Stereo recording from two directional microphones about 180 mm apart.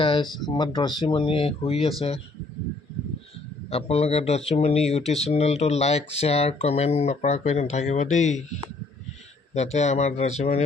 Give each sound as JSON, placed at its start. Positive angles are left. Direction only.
{"t": 0.0, "sound": "a sound", "side_deg": 25}
{"t": 0.3, "sound": "speech", "side_deg": 25}
{"t": 3.7, "sound": "speech", "side_deg": 35}
{"t": 9.6, "sound": "speech", "side_deg": 40}